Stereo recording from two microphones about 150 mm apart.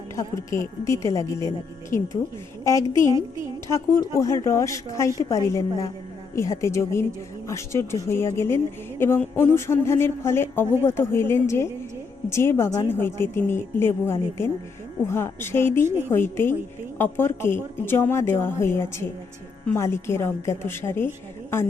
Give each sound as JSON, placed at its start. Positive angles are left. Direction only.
{"t": 0.2, "sound": "a woman's voice", "side_deg": 20}
{"t": 2.6, "sound": "a woman's voice", "side_deg": 20}